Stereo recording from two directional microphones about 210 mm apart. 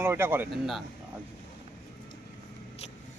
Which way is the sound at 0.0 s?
10° right (ahead or behind).